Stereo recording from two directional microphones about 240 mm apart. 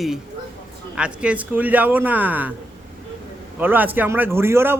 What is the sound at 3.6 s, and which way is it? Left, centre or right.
Speech, centre.